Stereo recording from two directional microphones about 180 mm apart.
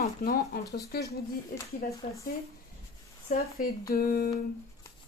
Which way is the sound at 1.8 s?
55° left (ahead or behind).